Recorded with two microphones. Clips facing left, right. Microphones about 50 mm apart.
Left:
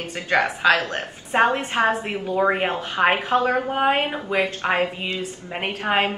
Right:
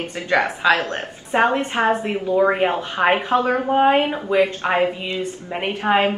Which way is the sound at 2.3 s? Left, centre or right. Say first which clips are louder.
Right 3 dB; centre.